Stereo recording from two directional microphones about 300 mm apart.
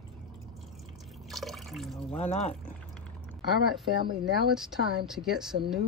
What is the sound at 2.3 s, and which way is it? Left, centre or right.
Speech, left.